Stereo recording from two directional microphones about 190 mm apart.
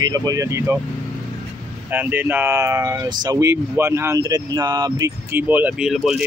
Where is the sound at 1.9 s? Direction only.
10° right (ahead or behind).